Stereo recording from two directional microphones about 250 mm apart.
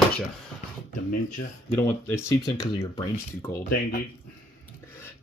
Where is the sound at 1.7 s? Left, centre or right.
Centre.